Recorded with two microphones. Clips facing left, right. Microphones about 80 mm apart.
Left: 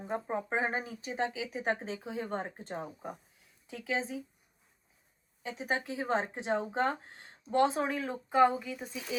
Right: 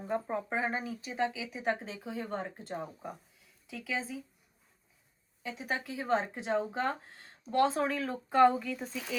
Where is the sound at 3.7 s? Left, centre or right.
Left.